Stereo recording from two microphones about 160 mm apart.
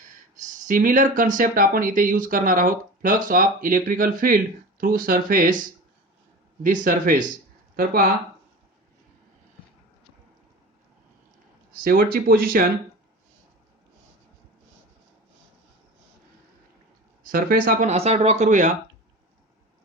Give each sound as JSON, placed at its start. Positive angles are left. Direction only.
{"t": 0.3, "sound": "speech", "side_deg": -55}
{"t": 11.8, "sound": "speech", "side_deg": -65}
{"t": 17.2, "sound": "speech", "side_deg": -65}
{"t": 17.8, "sound": "speech", "side_deg": -40}